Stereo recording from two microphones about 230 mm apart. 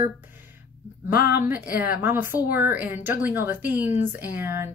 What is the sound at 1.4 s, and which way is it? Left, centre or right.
Speech, centre.